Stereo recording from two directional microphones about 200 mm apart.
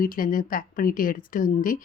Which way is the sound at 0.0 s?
45° left (ahead or behind).